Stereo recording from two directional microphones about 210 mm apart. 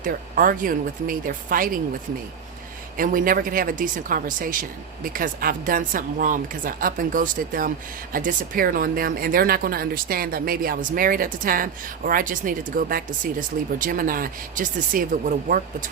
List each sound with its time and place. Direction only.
0.0 s a woman's voice: 40° right (ahead or behind)
3.0 s a woman's voice: 40° right (ahead or behind)